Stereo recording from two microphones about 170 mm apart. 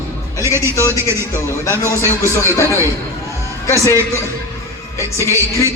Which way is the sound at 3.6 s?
15° left (ahead or behind).